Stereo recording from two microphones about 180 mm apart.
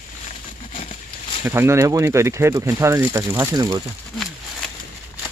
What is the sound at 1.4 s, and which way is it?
Speech, 15° right (ahead or behind).